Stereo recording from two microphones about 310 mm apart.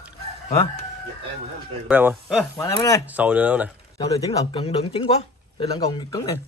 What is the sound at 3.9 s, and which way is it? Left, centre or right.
Speech, centre.